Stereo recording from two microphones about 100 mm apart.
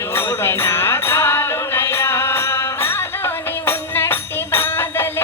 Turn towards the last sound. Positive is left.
turn(degrees=25)  # may be behind; listen again after turning